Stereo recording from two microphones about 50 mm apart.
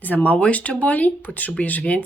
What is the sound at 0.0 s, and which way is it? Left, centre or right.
Speech, left.